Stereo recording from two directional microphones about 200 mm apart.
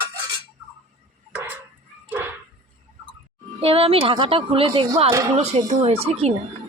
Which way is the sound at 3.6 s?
30° right (ahead or behind).